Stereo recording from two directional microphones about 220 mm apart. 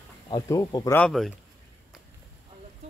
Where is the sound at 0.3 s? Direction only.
15° left (ahead or behind).